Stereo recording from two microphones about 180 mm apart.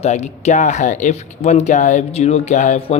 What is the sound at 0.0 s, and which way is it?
Speech, 35° left (ahead or behind).